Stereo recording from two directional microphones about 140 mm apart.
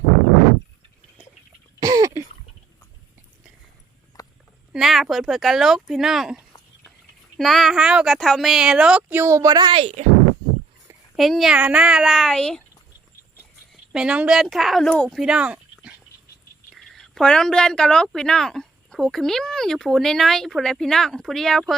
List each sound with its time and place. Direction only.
1.8 s throat clearing: 25° right (ahead or behind)
4.1 s a sound: 25° left (ahead or behind)
4.7 s speech: centre (ahead or behind); by 9.7 s 30° right (ahead or behind)
9.7 s speech: 45° right (ahead or behind)
11.2 s speech: centre (ahead or behind)
13.9 s speech: 5° right (ahead or behind)
15.2 s speech: 5° right (ahead or behind)
16.7 s speech: 5° left (ahead or behind)